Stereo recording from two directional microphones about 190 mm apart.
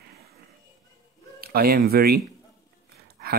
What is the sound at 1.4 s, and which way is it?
Speech, 55° right (ahead or behind).